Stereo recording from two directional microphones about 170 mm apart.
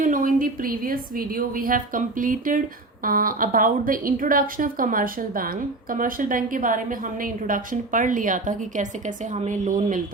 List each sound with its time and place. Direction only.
0.0 s a woman's voice: 55° right (ahead or behind)